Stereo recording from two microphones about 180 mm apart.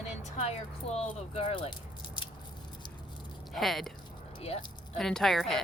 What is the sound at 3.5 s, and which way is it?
Speech, centre (ahead or behind).